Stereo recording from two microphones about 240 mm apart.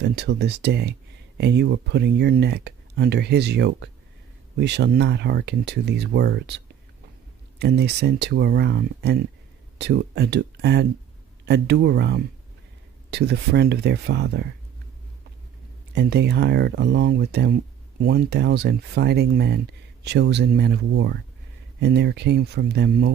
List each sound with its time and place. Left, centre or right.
0.0 s speech: right
15.9 s speech: right